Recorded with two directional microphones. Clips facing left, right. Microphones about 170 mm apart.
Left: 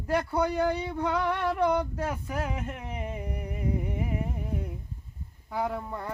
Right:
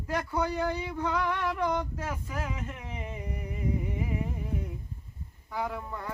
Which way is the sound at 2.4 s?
40° left (ahead or behind).